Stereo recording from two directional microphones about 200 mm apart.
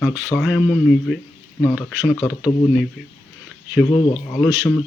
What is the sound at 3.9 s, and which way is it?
Speech, 20° left (ahead or behind).